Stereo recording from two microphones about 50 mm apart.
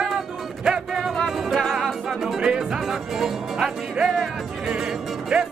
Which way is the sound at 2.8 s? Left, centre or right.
Centre.